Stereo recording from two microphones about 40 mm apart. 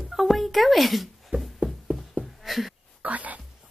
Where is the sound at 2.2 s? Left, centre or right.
Centre.